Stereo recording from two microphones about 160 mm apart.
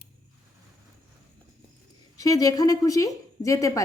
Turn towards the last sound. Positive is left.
turn(degrees=20)  # may be behind; listen again after turning